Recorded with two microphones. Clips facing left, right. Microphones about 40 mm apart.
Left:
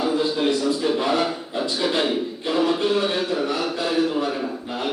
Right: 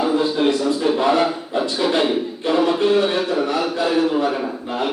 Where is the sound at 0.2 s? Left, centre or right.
Right.